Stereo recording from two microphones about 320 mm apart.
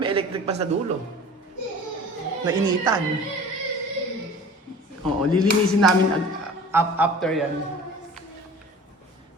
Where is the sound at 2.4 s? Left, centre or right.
Centre.